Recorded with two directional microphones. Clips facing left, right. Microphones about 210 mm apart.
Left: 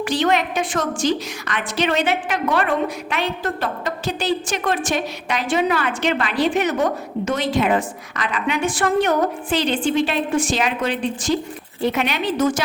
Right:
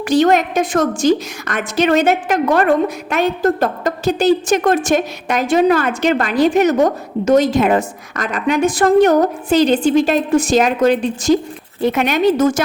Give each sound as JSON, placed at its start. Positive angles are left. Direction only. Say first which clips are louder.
{"t": 0.0, "sound": "a woman's voice", "louder": "right 6 dB", "side_deg": -45}